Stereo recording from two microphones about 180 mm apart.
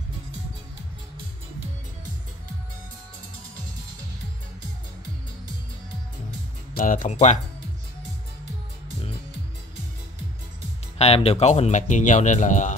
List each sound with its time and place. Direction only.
6.7 s speech: 50° left (ahead or behind)
11.0 s speech: 35° left (ahead or behind)